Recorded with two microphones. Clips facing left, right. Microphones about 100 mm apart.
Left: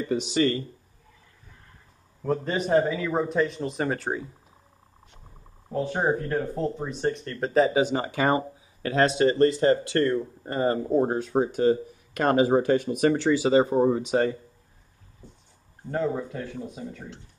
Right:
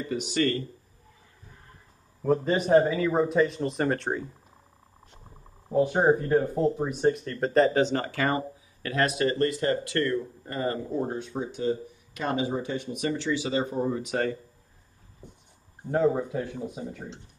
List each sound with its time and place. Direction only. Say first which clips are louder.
0.1 s speech: left 3 dB; 20° left (ahead or behind)
2.2 s speech: right 2 dB; 5° right (ahead or behind)
5.7 s speech: right 4 dB; 10° right (ahead or behind); by 11.0 s 30° left (ahead or behind)
11.0 s speech: left 6 dB; 45° left (ahead or behind)
11.3 s speech: left 8 dB; 60° left (ahead or behind)
12.9 s speech: left 7 dB; 45° left (ahead or behind); by 14.3 s 20° left (ahead or behind)
15.2 s a sound: right 1 dB; 20° right (ahead or behind)
15.9 s speech: right 3 dB; 15° right (ahead or behind)